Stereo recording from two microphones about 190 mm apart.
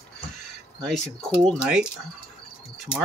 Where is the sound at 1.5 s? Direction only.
5° right (ahead or behind).